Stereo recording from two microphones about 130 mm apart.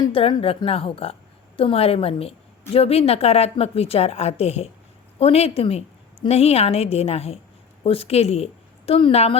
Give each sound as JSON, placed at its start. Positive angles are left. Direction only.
{"t": 0.1, "sound": "a woman's voice", "side_deg": 45}